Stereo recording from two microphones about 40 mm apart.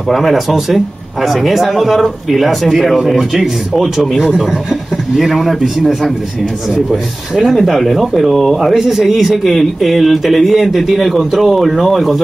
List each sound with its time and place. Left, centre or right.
0.1 s speech: centre